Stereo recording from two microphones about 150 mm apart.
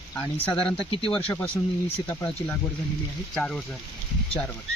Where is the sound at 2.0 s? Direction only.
10° left (ahead or behind).